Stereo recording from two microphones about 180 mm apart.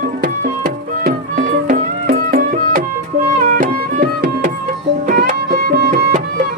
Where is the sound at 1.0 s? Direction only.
50° right (ahead or behind).